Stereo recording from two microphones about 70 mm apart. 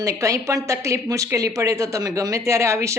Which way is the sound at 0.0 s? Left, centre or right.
Right.